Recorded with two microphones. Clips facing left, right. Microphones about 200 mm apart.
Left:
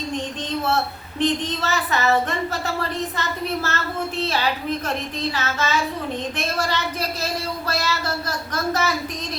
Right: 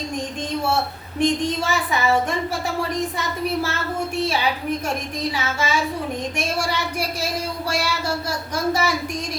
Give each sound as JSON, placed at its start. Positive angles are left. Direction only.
{"t": 1.2, "sound": "speech", "side_deg": -10}